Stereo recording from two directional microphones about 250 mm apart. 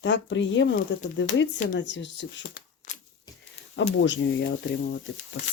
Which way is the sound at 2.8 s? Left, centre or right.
Left.